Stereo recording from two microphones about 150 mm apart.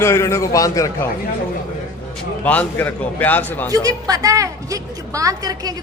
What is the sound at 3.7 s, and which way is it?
A woman's voice, 25° right (ahead or behind).